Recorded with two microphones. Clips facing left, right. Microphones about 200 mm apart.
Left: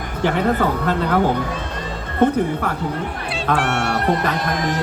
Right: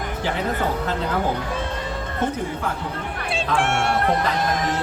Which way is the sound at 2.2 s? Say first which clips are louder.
Left 9 dB; 60° left (ahead or behind).